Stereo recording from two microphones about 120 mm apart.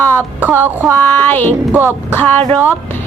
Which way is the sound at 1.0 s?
15° left (ahead or behind).